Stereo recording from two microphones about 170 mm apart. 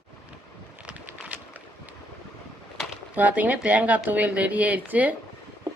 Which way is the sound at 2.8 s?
10° right (ahead or behind).